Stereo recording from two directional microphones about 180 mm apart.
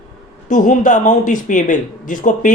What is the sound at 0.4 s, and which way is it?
Speech, 45° left (ahead or behind).